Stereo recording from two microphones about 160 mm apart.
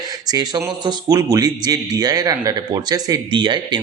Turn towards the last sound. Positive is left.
turn(degrees=-30)  # may be behind; listen again after turning